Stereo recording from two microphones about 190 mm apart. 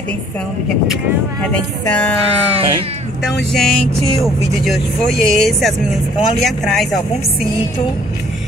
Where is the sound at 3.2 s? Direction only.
Centre (ahead or behind).